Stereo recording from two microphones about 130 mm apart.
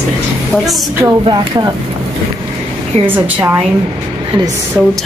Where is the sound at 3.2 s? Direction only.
10° right (ahead or behind).